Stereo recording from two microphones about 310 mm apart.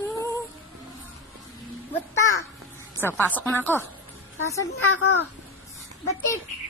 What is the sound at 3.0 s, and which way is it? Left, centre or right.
Speech, centre.